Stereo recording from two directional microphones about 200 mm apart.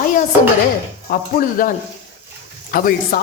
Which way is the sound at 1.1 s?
45° left (ahead or behind).